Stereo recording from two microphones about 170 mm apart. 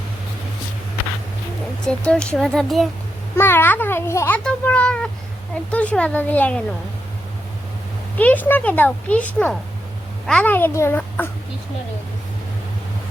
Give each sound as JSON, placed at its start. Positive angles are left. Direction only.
{"t": 1.8, "sound": "speech", "side_deg": 5}
{"t": 3.3, "sound": "a child's voice", "side_deg": 15}
{"t": 8.1, "sound": "a child's voice", "side_deg": 10}